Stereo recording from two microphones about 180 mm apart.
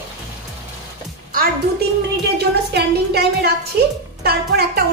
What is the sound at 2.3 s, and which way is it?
A woman's voice, 65° right (ahead or behind).